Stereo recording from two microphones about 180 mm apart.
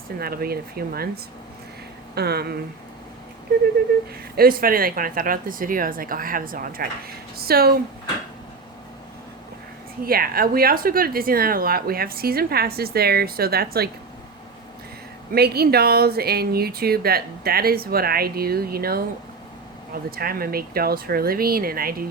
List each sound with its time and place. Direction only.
0.2 s speech: 55° right (ahead or behind)
4.4 s speech: 55° right (ahead or behind)
10.0 s speech: 55° right (ahead or behind)
15.3 s speech: 60° right (ahead or behind)